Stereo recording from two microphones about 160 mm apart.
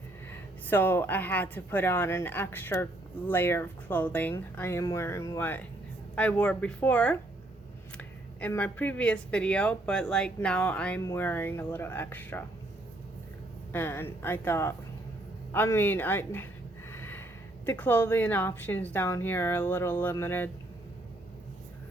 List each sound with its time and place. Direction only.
0.3 s speech: 10° left (ahead or behind)
13.7 s speech: 15° left (ahead or behind)
16.9 s snort: 15° left (ahead or behind)
17.7 s speech: 15° left (ahead or behind)